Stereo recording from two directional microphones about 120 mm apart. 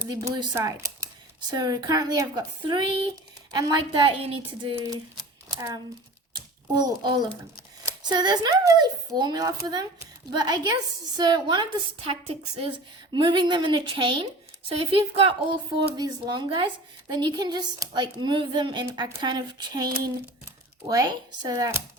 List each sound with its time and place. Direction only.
0.1 s speech: 30° right (ahead or behind); by 4.9 s 45° right (ahead or behind)
5.5 s speech: 30° right (ahead or behind)
11.9 s a woman's voice: 55° right (ahead or behind)
13.1 s a woman's voice: 40° right (ahead or behind)
16.0 s speech: 35° right (ahead or behind)